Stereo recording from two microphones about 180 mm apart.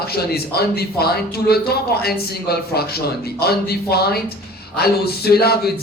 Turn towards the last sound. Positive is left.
turn(degrees=60)  # may be behind; listen again after turning